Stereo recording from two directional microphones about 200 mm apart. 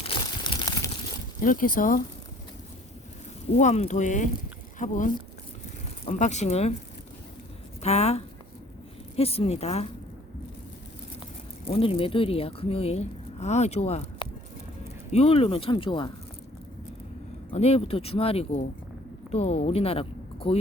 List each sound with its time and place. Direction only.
0.0 s crumpling: 25° left (ahead or behind)
1.4 s speech: 45° left (ahead or behind)
3.5 s speech: 35° left (ahead or behind)
7.8 s speech: 30° left (ahead or behind)
11.7 s speech: 25° left (ahead or behind)
17.5 s speech: 30° left (ahead or behind)